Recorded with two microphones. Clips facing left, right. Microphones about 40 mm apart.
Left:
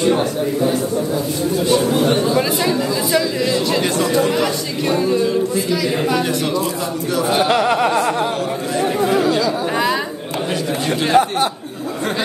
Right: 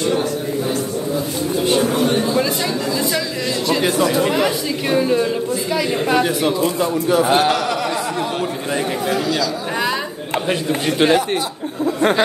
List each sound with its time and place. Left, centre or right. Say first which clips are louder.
2.3 s chatter: left 2 dB; centre
4.1 s a man's voice: even; centre
7.5 s a sound: left 5 dB; left